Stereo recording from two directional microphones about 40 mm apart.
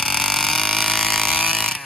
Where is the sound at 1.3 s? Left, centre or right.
Left.